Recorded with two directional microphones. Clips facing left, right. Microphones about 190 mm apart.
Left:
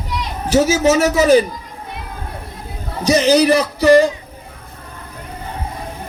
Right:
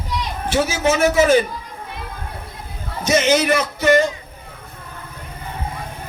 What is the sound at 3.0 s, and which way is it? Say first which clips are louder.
A man's voice: left 4 dB; 35° left (ahead or behind).